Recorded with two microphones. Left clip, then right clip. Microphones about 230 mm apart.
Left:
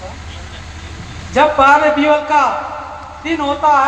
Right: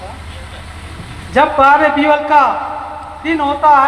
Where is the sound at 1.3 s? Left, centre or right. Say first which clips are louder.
Even; right.